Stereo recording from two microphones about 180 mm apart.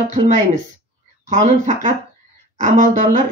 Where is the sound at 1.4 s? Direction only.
40° right (ahead or behind).